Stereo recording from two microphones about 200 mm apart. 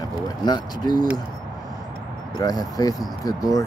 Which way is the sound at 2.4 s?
20° left (ahead or behind).